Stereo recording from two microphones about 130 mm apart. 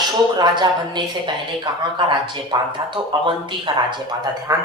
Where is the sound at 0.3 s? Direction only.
35° right (ahead or behind).